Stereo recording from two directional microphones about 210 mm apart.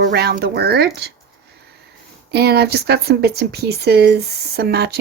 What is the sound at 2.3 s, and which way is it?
Speech, 50° right (ahead or behind).